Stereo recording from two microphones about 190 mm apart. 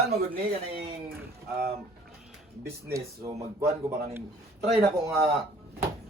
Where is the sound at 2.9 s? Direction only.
15° right (ahead or behind).